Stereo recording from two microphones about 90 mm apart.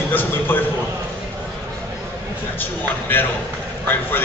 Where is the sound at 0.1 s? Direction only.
20° left (ahead or behind).